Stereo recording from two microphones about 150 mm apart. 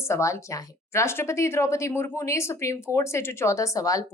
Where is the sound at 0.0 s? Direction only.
20° left (ahead or behind).